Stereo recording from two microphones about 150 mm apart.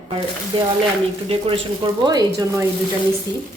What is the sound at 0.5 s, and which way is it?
A woman's voice, 35° right (ahead or behind).